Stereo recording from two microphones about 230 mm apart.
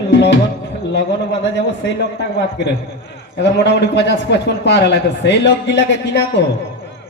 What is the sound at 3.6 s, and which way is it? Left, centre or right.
A man's voice, left.